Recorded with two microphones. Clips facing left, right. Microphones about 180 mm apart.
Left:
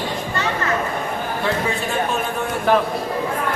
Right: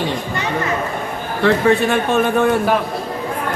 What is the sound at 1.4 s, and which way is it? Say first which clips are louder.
A man's voice: right 11 dB; 65° right (ahead or behind).